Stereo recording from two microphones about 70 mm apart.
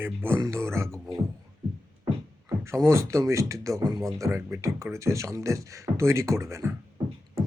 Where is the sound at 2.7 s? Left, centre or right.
Right.